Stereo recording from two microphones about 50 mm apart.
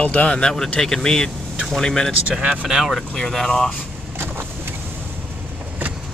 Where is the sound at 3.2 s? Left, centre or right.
Centre.